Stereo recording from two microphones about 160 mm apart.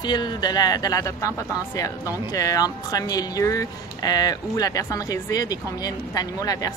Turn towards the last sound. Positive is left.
turn(degrees=25)  # may be behind; listen again after turning